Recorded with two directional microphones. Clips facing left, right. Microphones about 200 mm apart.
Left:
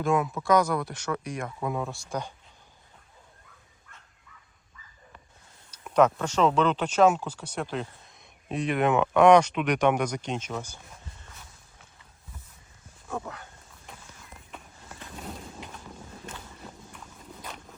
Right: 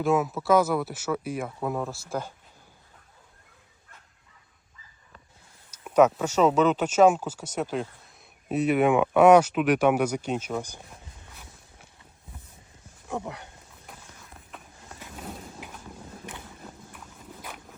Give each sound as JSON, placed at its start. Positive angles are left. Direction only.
{"t": 0.0, "sound": "speech", "side_deg": -5}
{"t": 5.8, "sound": "speech", "side_deg": -10}
{"t": 13.1, "sound": "speech", "side_deg": -15}
{"t": 14.5, "sound": "a sound", "side_deg": -5}
{"t": 16.9, "sound": "walk", "side_deg": -5}